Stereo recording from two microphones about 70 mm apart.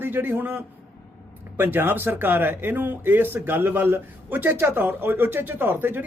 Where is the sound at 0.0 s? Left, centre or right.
Right.